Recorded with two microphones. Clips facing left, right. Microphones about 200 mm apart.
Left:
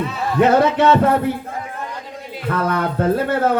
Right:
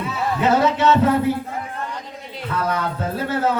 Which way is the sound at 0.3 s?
55° left (ahead or behind).